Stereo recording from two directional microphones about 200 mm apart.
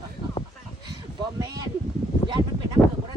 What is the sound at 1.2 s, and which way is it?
Speech, 20° right (ahead or behind).